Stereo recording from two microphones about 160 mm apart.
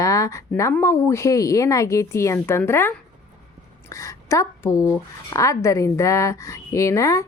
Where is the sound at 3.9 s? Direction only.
20° left (ahead or behind).